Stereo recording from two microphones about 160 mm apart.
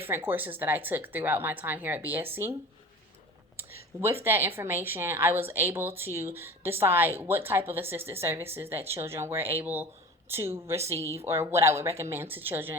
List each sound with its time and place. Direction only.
0.0 s a woman's voice: 15° right (ahead or behind)
3.6 s a woman's voice: 15° right (ahead or behind)